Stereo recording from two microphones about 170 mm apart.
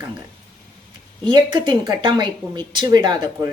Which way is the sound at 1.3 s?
25° right (ahead or behind).